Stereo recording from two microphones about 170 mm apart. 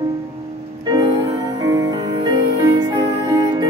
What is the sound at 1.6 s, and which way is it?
Music, 20° right (ahead or behind).